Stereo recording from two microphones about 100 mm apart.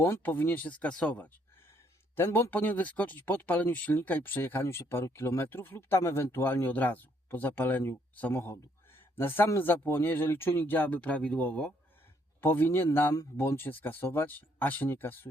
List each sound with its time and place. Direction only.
0.0 s speech: 20° left (ahead or behind)